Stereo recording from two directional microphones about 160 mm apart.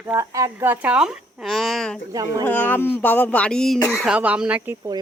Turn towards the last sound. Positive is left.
turn(degrees=-5)  # may be behind; listen again after turning